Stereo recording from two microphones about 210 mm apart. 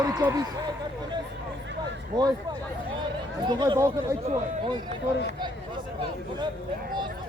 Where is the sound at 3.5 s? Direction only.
20° right (ahead or behind).